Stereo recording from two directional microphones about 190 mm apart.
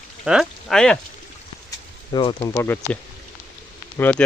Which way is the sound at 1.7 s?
25° left (ahead or behind).